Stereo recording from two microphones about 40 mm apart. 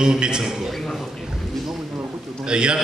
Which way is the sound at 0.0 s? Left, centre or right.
Centre.